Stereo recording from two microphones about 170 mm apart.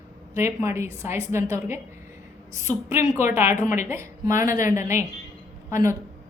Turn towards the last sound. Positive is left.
turn(degrees=-15)  # may be behind; listen again after turning